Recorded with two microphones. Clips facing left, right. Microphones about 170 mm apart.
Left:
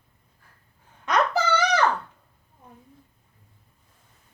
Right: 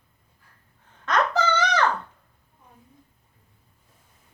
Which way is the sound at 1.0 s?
10° left (ahead or behind).